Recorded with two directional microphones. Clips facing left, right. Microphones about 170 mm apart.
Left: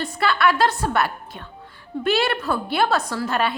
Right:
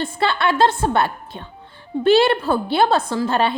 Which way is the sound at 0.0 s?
25° right (ahead or behind).